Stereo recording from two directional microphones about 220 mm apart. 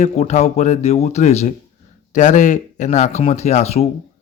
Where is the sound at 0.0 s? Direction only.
30° left (ahead or behind).